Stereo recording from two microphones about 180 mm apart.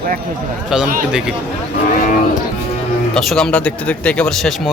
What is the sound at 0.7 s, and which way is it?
Speech, centre (ahead or behind).